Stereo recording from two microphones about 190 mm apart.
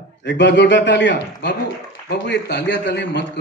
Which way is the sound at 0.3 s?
65° left (ahead or behind).